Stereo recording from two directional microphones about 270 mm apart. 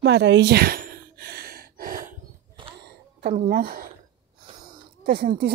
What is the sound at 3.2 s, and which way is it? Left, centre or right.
Speech, right.